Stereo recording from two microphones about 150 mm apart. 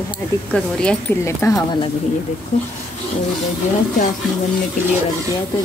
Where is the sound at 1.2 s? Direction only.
20° left (ahead or behind).